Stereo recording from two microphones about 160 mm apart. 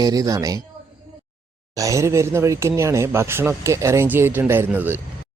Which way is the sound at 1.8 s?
20° right (ahead or behind).